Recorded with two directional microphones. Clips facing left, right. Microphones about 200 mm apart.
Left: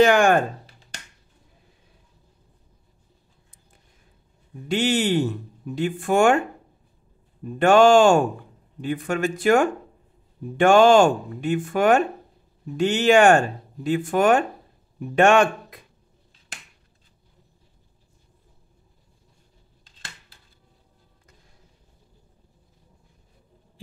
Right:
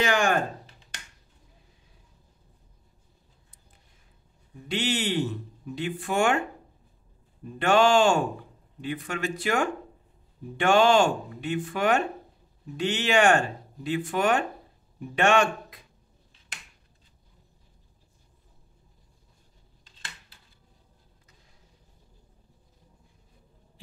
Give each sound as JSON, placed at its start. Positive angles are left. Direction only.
{"t": 0.0, "sound": "speech", "side_deg": 55}
{"t": 4.6, "sound": "speech", "side_deg": 45}
{"t": 7.5, "sound": "speech", "side_deg": 50}